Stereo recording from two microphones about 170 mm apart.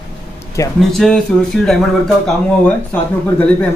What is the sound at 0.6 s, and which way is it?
Speech, 20° left (ahead or behind).